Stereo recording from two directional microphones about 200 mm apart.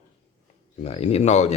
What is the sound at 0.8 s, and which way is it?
Speech, 30° left (ahead or behind).